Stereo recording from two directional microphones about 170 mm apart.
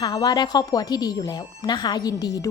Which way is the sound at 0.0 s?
25° left (ahead or behind).